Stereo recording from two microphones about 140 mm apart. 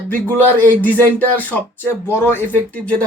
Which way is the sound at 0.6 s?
15° left (ahead or behind).